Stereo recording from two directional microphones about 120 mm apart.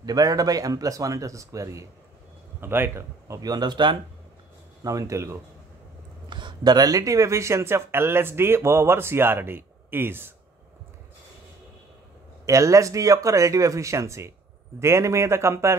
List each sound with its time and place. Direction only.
0.0 s speech: 30° right (ahead or behind)
4.8 s speech: 25° right (ahead or behind)
6.2 s speech: 40° right (ahead or behind); by 10.3 s 20° right (ahead or behind)
12.4 s speech: 25° right (ahead or behind)